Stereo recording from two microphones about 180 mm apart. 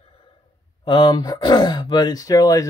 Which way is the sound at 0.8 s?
25° left (ahead or behind).